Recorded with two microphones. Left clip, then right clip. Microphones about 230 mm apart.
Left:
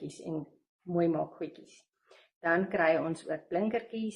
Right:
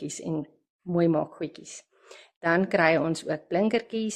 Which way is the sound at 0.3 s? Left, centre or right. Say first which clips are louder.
Right 4 dB; right.